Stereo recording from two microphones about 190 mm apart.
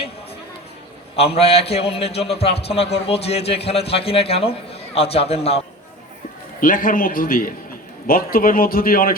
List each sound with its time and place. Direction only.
1.1 s a man's voice: 30° left (ahead or behind)
6.6 s a man's voice: 45° left (ahead or behind)